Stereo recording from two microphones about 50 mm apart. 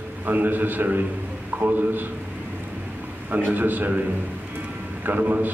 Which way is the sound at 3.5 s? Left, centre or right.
Right.